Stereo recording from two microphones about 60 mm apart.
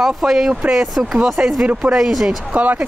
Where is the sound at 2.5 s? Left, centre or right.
Right.